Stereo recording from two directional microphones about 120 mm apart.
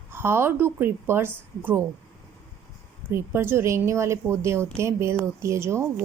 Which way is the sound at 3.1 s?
20° right (ahead or behind).